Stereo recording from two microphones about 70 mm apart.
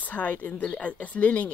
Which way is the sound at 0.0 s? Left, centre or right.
Left.